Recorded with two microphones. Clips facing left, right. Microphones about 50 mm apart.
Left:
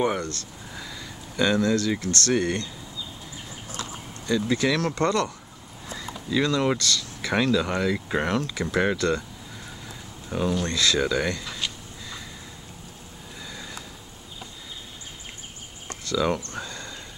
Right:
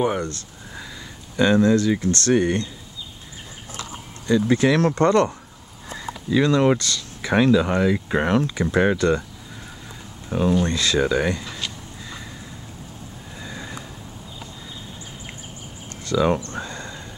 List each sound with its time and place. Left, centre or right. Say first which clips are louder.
0.2 s speech: right 3 dB; centre
2.3 s speech: right 5 dB; centre
4.5 s speech: right 6 dB; right
6.3 s speech: right 5 dB; centre
10.3 s speech: right 5 dB; centre
13.5 s a sound: right 5 dB; right
16.2 s speech: right 5 dB; centre
16.5 s a sound: right 4 dB; right